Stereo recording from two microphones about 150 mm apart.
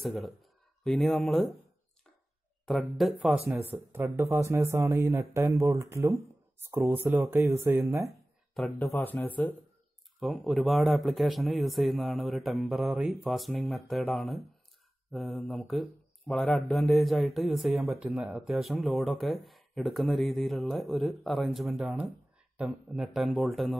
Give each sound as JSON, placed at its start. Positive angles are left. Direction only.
{"t": 0.0, "sound": "speech", "side_deg": 0}
{"t": 2.6, "sound": "a man's voice", "side_deg": 0}
{"t": 3.4, "sound": "speech", "side_deg": -15}
{"t": 8.5, "sound": "a man's voice", "side_deg": 0}
{"t": 10.2, "sound": "a man's voice", "side_deg": 0}